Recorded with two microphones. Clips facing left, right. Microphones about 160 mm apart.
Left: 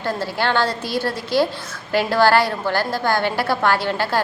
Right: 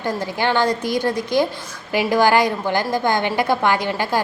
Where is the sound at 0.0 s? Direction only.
15° right (ahead or behind).